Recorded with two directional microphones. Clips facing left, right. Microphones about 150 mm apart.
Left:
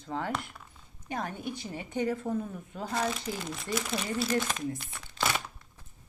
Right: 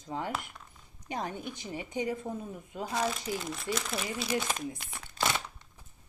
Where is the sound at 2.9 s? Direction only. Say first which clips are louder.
Even; centre (ahead or behind).